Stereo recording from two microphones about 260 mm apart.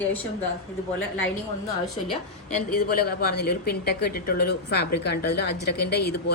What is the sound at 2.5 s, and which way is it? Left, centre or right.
A woman's voice, left.